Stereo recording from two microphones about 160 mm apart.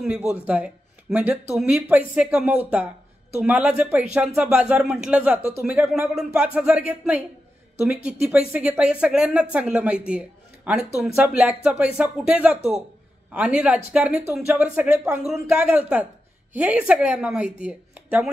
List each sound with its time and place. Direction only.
0.3 s speech: 10° right (ahead or behind)